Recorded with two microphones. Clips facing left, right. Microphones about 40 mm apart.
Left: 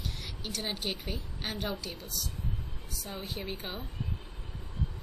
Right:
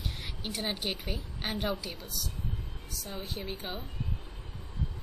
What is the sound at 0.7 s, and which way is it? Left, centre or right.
A woman's voice, centre.